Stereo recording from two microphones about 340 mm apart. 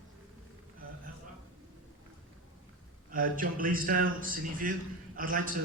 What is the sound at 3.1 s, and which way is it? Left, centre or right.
A man's voice, right.